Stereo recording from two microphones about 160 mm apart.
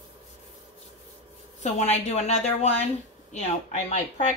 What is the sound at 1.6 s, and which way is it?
Speech, 45° left (ahead or behind).